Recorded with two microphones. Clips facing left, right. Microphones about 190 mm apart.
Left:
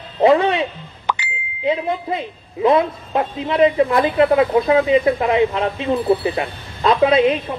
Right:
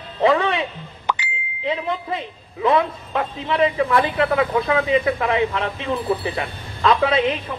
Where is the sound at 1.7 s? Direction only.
35° left (ahead or behind).